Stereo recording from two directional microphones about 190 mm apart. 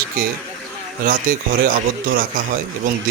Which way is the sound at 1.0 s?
45° right (ahead or behind).